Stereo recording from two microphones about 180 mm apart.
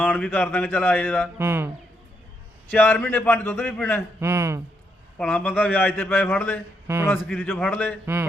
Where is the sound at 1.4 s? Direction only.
15° right (ahead or behind).